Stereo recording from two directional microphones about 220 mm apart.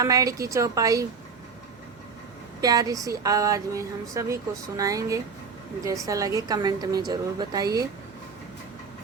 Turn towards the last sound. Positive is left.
turn(degrees=-15)  # may be behind; listen again after turning